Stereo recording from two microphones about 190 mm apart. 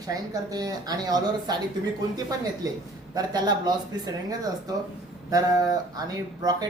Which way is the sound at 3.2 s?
20° right (ahead or behind).